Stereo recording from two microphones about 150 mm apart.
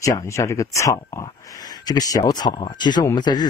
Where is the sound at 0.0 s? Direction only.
20° left (ahead or behind).